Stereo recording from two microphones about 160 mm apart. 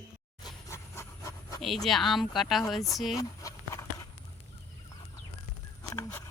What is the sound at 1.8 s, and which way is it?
Speech, centre (ahead or behind).